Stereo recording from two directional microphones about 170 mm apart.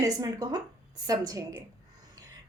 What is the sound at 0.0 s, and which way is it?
A woman's voice, 20° right (ahead or behind).